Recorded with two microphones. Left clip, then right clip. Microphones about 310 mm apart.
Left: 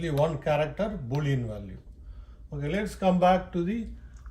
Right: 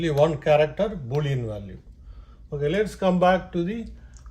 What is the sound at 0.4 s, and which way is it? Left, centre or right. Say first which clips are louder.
Speech: right 7 dB; right.